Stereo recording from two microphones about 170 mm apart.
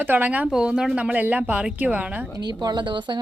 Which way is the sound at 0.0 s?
10° right (ahead or behind).